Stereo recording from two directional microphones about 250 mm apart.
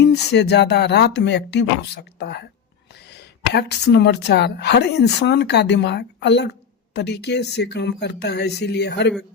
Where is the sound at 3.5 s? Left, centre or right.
Left.